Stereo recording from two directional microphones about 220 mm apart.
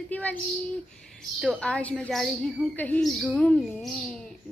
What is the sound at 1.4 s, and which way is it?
A woman's voice, centre (ahead or behind).